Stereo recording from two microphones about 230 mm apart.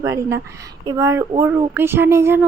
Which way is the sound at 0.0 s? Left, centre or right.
Centre.